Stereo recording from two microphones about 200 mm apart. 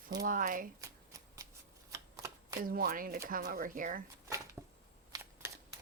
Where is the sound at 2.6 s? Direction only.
45° right (ahead or behind).